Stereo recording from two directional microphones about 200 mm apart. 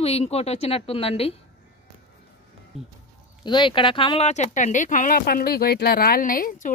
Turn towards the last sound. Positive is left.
turn(degrees=45)  # may be behind; listen again after turning